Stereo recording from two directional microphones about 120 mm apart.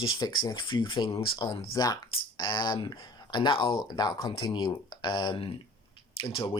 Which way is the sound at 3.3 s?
40° left (ahead or behind).